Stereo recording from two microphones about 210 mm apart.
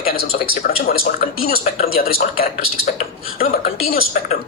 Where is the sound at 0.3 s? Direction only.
45° left (ahead or behind).